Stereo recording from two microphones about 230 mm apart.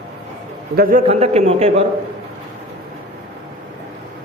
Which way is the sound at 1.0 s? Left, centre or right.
Right.